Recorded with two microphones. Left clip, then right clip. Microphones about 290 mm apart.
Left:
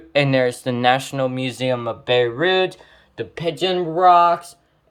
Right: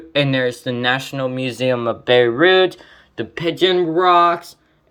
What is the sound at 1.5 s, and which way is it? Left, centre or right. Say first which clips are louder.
Speech: right 3 dB; left.